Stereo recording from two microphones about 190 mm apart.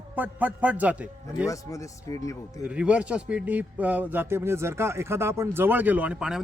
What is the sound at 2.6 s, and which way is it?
A man's voice, 5° right (ahead or behind).